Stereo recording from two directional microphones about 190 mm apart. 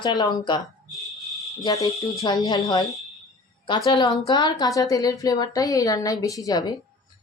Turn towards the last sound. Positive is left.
turn(degrees=20)  # may be behind; listen again after turning